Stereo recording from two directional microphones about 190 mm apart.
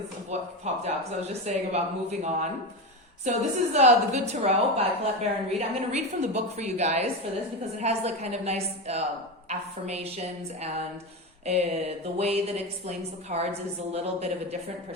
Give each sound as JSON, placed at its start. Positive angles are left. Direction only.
{"t": 0.3, "sound": "a woman's voice", "side_deg": -35}